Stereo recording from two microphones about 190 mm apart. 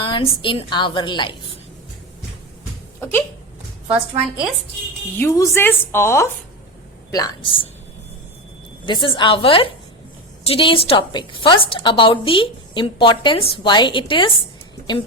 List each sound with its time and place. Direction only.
0.0 s a woman's voice: 25° left (ahead or behind)
3.0 s a woman's voice: 10° left (ahead or behind)
3.8 s a woman's voice: 5° right (ahead or behind)
5.1 s a woman's voice: 10° left (ahead or behind)
8.9 s a woman's voice: 25° left (ahead or behind)